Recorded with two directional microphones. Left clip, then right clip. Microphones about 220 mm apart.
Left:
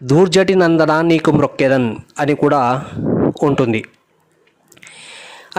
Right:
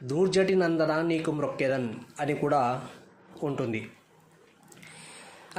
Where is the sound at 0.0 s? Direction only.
45° left (ahead or behind).